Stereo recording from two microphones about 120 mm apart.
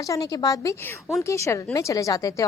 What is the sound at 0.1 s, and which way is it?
A woman's voice, 30° left (ahead or behind).